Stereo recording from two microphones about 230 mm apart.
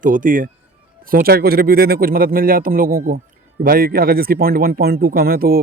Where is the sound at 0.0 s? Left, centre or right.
Right.